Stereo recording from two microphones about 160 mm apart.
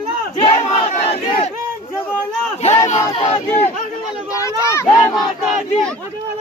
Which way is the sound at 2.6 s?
45° left (ahead or behind).